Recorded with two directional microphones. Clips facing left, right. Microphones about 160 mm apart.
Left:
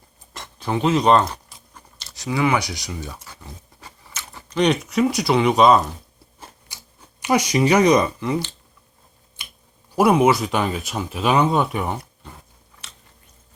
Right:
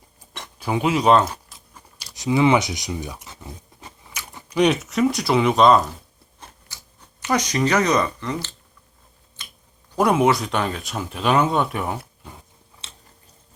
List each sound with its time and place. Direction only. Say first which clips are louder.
0.6 s speech: left 1 dB; 10° right (ahead or behind)
6.7 s a sound: left 1 dB; 15° left (ahead or behind)
7.2 s speech: left 3 dB; 10° left (ahead or behind)
9.4 s finger snapping: left 1 dB; 10° left (ahead or behind)
9.9 s speech: left 2 dB; 5° left (ahead or behind)
12.8 s chewing: even; 25° right (ahead or behind)